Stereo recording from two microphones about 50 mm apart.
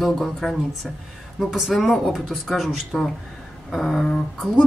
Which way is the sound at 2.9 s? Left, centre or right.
Centre.